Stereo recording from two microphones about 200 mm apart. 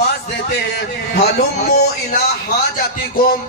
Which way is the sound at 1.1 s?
50° left (ahead or behind).